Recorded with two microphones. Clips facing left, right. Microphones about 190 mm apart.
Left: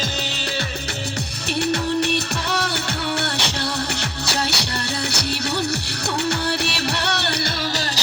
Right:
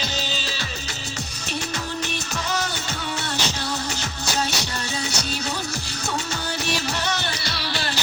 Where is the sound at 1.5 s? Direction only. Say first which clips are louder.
Left 9 dB; 65° left (ahead or behind).